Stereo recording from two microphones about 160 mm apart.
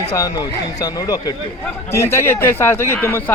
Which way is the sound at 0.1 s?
20° left (ahead or behind).